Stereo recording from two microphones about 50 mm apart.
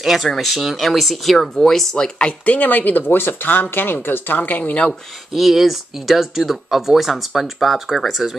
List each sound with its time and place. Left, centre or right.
0.0 s speech: centre; by 4.9 s left
5.3 s speech: centre